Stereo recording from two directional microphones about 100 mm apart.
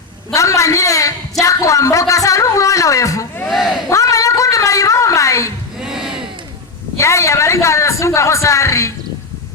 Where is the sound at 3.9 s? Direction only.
30° left (ahead or behind).